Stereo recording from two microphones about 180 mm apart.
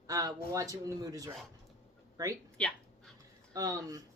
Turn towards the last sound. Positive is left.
turn(degrees=-20)  # may be behind; listen again after turning